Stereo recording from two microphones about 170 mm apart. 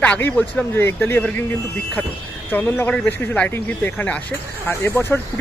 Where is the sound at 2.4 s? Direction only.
10° left (ahead or behind).